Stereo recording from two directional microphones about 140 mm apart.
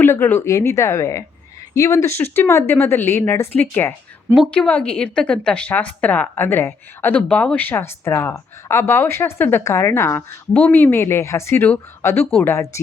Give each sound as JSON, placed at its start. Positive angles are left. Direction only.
{"t": 0.0, "sound": "speech", "side_deg": 15}